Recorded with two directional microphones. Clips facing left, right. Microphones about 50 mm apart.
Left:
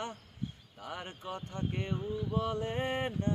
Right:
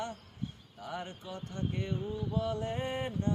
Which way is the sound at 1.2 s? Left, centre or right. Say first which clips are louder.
Left 1 dB; left.